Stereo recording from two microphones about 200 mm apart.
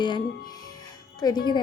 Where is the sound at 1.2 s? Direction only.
20° left (ahead or behind).